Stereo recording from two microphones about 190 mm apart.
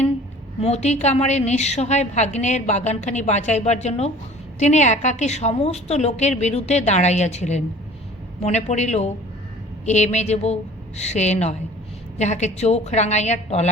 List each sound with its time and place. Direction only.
0.6 s a woman's voice: 35° left (ahead or behind)